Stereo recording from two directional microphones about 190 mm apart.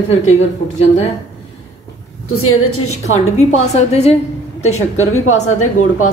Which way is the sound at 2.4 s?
90° left.